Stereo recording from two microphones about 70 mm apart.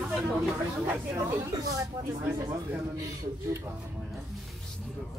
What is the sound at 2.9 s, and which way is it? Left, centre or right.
Speech, right.